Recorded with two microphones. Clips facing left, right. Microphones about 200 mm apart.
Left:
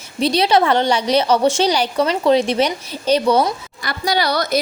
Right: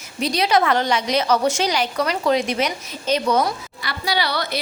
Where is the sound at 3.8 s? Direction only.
45° left (ahead or behind).